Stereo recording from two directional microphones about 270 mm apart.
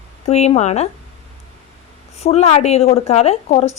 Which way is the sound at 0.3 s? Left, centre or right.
Left.